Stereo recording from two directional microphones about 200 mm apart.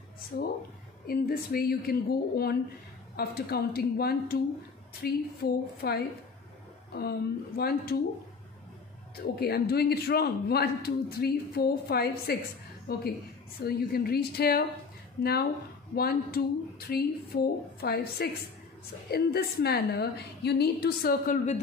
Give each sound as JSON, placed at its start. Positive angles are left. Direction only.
{"t": 0.3, "sound": "a man's voice", "side_deg": 45}
{"t": 9.2, "sound": "a man's voice", "side_deg": 50}
{"t": 15.9, "sound": "a man's voice", "side_deg": 50}